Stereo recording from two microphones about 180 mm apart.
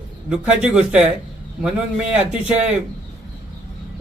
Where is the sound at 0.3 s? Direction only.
5° right (ahead or behind).